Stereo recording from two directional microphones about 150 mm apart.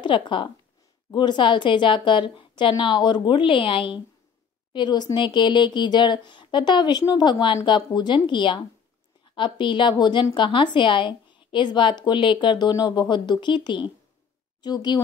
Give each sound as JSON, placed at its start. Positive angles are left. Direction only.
{"t": 0.0, "sound": "a woman's voice", "side_deg": 30}